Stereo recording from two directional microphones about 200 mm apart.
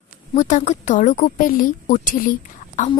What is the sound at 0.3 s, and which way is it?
A woman's voice, 35° left (ahead or behind).